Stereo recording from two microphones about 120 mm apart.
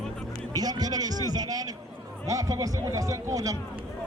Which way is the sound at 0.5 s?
35° right (ahead or behind).